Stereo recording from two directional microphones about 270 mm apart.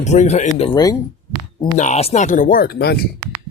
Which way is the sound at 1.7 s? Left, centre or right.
Left.